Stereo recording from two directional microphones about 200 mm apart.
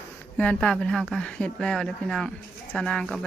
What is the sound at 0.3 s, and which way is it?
Speech, 5° left (ahead or behind).